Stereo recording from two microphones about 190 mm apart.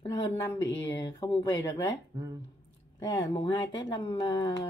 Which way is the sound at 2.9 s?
20° left (ahead or behind).